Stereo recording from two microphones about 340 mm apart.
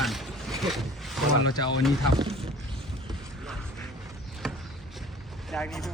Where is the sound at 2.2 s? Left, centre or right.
Centre.